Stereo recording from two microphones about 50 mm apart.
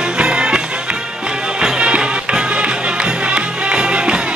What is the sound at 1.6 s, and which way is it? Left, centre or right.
Music, centre.